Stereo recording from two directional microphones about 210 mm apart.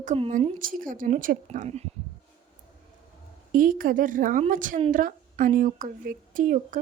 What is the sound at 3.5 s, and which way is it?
A woman's voice, 40° right (ahead or behind).